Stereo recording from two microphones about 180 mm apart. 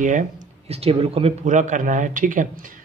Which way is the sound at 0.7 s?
35° right (ahead or behind).